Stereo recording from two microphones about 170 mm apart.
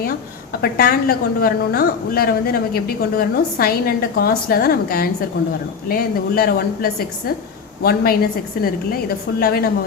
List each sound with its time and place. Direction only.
0.6 s a woman's voice: 65° left (ahead or behind)